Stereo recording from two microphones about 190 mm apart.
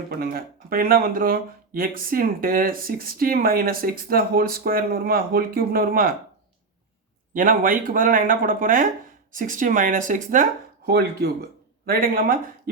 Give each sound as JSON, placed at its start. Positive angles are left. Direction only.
{"t": 0.1, "sound": "speech", "side_deg": -50}
{"t": 7.3, "sound": "speech", "side_deg": -45}